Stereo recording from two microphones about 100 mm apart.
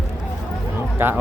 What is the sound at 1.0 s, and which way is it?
Speech, 20° right (ahead or behind).